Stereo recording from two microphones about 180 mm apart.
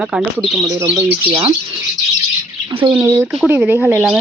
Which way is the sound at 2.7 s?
30° right (ahead or behind).